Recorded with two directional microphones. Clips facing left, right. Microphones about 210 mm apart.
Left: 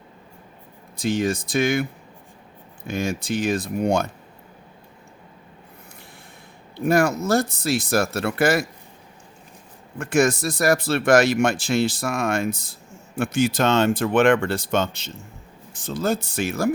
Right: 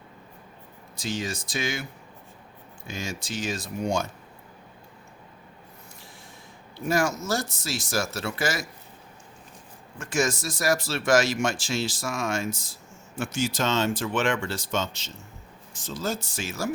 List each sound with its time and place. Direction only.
0.9 s speech: 55° left (ahead or behind)
6.8 s speech: 60° left (ahead or behind)
10.0 s speech: 60° left (ahead or behind)